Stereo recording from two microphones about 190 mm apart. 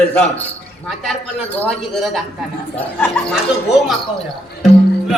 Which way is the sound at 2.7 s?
10° left (ahead or behind).